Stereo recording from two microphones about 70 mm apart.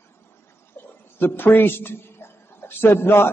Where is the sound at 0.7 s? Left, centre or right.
Left.